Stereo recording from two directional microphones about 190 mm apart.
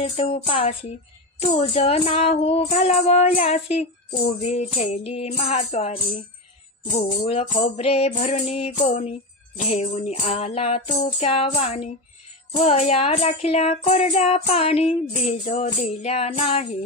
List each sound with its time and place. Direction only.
0.0 s speech: 30° left (ahead or behind)